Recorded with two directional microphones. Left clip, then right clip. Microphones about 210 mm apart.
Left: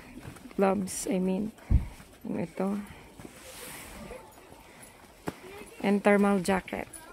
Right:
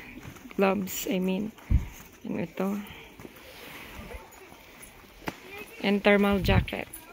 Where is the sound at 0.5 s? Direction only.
5° right (ahead or behind).